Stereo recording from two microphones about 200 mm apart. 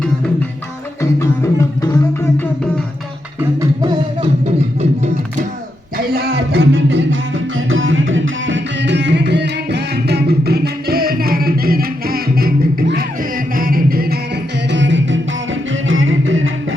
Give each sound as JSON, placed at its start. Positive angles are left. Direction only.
{"t": 3.6, "sound": "music", "side_deg": -20}
{"t": 6.0, "sound": "music", "side_deg": -50}
{"t": 7.7, "sound": "music", "side_deg": -75}
{"t": 14.7, "sound": "music", "side_deg": -65}
{"t": 15.9, "sound": "music", "side_deg": -75}